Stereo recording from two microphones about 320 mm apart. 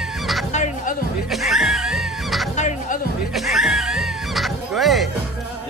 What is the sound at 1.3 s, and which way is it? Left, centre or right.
Music, centre.